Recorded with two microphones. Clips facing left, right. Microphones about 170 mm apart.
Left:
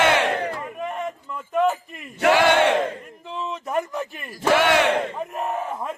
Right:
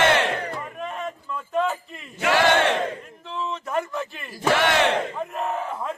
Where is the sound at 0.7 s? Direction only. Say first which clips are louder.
Left 2 dB; 10° left (ahead or behind).